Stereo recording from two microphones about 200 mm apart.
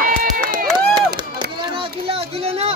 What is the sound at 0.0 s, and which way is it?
Crowd, 45° right (ahead or behind).